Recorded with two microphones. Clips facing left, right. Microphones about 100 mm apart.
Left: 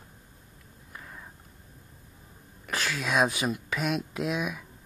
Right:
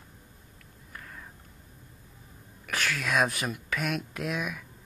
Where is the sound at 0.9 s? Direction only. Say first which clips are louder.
Even; 15° left (ahead or behind).